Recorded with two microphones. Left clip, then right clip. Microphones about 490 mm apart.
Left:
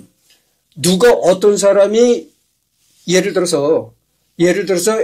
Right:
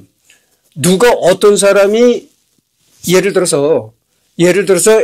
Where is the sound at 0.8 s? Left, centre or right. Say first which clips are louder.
Right 2 dB; right.